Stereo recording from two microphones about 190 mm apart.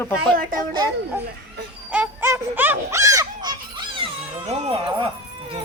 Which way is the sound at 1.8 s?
10° right (ahead or behind).